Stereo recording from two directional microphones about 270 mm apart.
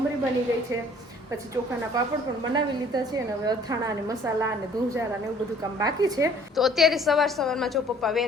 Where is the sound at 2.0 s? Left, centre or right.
Centre.